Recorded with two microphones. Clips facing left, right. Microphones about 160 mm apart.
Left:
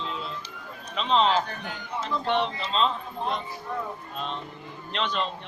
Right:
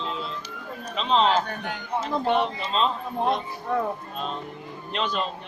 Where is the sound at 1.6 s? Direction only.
50° right (ahead or behind).